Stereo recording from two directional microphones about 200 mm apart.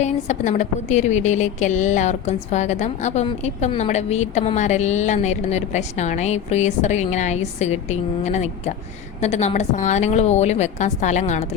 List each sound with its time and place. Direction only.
0.0 s a woman's voice: 35° left (ahead or behind)